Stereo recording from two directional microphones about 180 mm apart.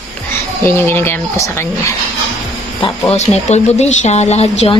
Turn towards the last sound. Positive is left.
turn(degrees=35)  # may be behind; listen again after turning